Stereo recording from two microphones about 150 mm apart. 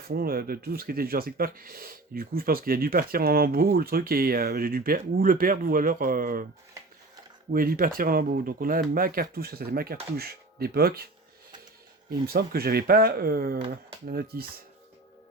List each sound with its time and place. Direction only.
0.1 s speech: 90° right; by 6.4 s 70° right (ahead or behind)
7.5 s speech: 75° right (ahead or behind); by 11.1 s 90° right
12.2 s speech: 90° right